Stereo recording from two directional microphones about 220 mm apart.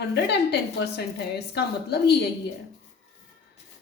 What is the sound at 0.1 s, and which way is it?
A woman's voice, 50° left (ahead or behind).